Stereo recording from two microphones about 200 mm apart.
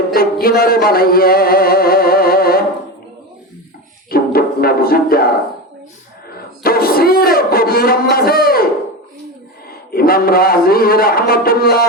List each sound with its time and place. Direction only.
0.1 s music: 50° left (ahead or behind)
4.1 s music: 50° left (ahead or behind)
6.6 s a man's voice: 50° left (ahead or behind)
9.6 s a man's voice: 50° left (ahead or behind)